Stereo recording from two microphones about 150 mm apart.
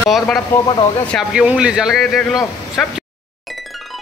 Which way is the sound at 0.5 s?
10° left (ahead or behind).